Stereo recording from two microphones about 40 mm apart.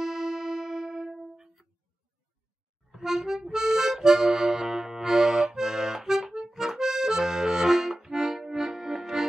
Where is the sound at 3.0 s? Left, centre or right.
Centre.